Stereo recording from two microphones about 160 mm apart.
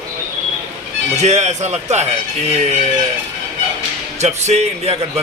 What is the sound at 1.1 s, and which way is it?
Speech, 45° right (ahead or behind).